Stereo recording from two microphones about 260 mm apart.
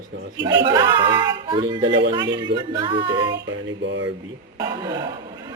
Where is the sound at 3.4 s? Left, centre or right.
Right.